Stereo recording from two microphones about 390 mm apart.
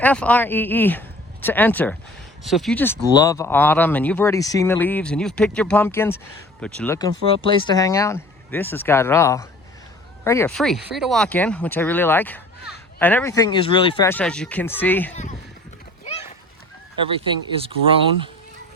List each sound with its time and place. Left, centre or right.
0.0 s speech: centre
15.1 s speech: centre
17.1 s speech: centre